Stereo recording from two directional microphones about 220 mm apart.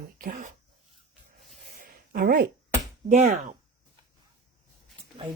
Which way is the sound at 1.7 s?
45° right (ahead or behind).